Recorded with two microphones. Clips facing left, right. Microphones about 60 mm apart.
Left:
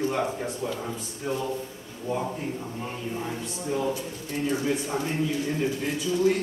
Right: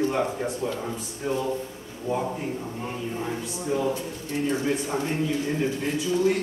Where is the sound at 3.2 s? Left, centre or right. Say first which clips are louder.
Right 2 dB; centre.